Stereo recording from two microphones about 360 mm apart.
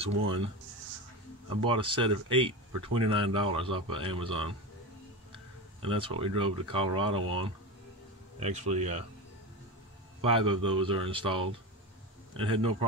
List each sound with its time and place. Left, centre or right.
0.0 s speech: centre
1.6 s speech: centre
5.8 s speech: centre
10.2 s speech: centre